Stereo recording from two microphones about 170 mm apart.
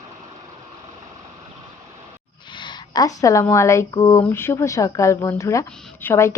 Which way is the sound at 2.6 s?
25° left (ahead or behind).